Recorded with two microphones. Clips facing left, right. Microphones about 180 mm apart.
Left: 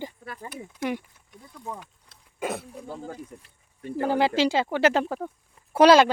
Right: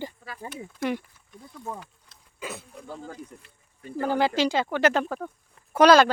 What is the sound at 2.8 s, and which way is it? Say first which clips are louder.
Speech: left 2 dB; 30° left (ahead or behind).